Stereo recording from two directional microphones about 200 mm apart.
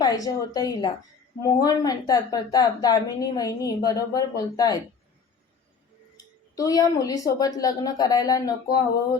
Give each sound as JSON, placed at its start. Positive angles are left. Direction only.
{"t": 0.0, "sound": "a woman's voice", "side_deg": 20}
{"t": 6.6, "sound": "speech", "side_deg": 15}